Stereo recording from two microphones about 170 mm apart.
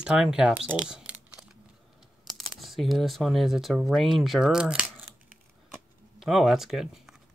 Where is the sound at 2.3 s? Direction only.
Centre (ahead or behind).